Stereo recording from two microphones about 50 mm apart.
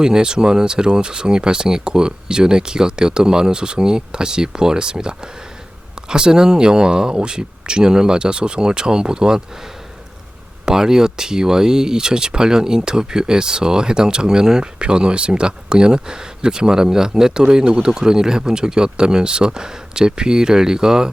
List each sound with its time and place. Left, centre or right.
0.0 s speech: centre
10.7 s speech: centre